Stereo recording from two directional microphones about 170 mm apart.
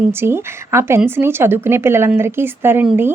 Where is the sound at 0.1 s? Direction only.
15° right (ahead or behind).